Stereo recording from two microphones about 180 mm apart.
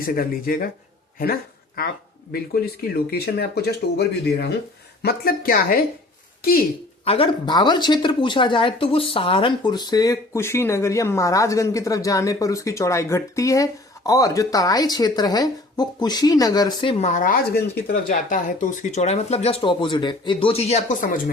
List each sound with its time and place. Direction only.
0.0 s speech: 55° left (ahead or behind)
5.0 s speech: 55° left (ahead or behind)
7.0 s speech: 30° left (ahead or behind)
17.1 s speech: 50° left (ahead or behind)